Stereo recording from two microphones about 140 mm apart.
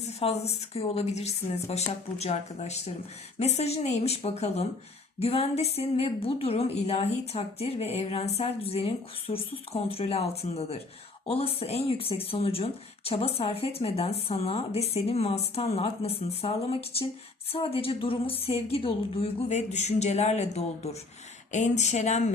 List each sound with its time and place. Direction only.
0.0 s a woman's voice: 45° left (ahead or behind)
17.5 s a woman's voice: 40° left (ahead or behind)